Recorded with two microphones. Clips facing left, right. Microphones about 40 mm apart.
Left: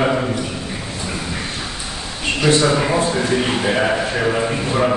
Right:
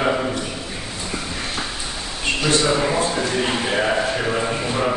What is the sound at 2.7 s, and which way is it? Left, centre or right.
A man's voice, centre.